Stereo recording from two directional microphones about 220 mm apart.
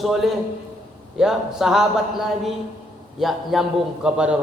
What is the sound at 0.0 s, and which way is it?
A man's voice, centre (ahead or behind).